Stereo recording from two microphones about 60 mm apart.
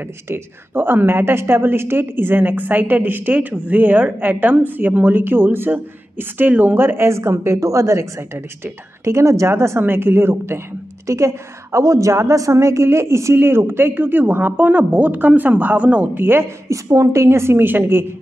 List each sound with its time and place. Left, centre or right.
0.0 s a woman's voice: right
11.1 s a woman's voice: right
16.6 s speech: right